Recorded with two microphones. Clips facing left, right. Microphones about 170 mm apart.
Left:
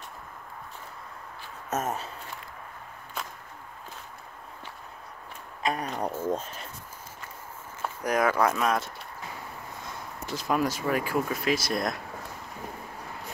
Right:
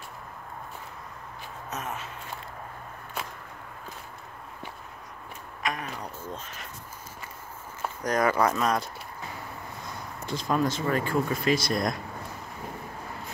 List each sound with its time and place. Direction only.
1.7 s speech: 45° left (ahead or behind)
5.6 s a sound: 30° left (ahead or behind)
5.9 s speech: 45° left (ahead or behind)
8.0 s speech: 5° left (ahead or behind)
10.2 s speech: 5° left (ahead or behind)